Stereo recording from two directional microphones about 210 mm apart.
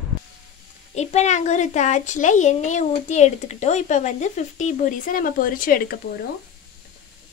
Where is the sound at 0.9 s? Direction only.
30° left (ahead or behind).